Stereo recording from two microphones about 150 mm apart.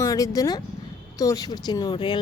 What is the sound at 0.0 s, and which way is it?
Speech, 25° left (ahead or behind).